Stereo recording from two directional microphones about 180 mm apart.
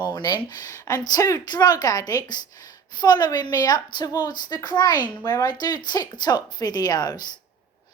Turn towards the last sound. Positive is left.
turn(degrees=20)  # may be behind; listen again after turning